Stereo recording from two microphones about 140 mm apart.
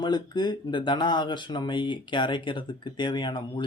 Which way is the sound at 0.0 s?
30° left (ahead or behind).